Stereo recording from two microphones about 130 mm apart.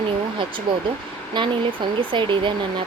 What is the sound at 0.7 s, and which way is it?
Speech, 40° right (ahead or behind).